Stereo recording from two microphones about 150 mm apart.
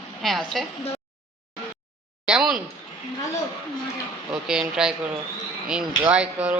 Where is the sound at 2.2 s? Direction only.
5° right (ahead or behind).